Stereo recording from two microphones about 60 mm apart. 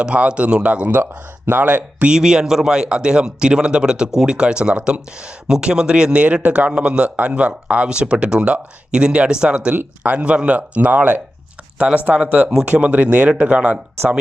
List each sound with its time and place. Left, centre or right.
0.0 s speech: centre
1.5 s speech: right
2.0 s speech: centre